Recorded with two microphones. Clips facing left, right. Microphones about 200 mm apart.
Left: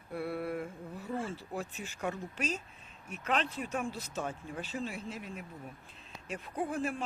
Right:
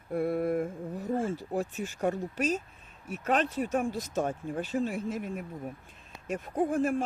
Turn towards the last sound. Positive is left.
turn(degrees=-45)  # may be behind; listen again after turning